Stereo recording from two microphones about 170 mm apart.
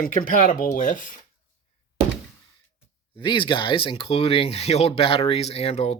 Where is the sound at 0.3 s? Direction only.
55° left (ahead or behind).